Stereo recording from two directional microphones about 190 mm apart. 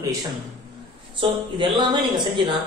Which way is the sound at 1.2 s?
25° right (ahead or behind).